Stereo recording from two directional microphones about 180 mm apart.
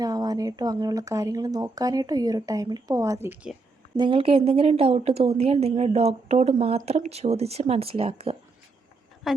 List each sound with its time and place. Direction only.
0.0 s speech: 20° right (ahead or behind)
3.9 s a woman's voice: 30° right (ahead or behind)
9.2 s a woman's voice: centre (ahead or behind)